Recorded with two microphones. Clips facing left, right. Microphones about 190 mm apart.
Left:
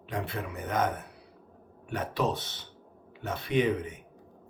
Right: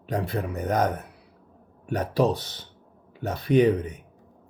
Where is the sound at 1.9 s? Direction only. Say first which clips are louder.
Right 7 dB; 40° right (ahead or behind).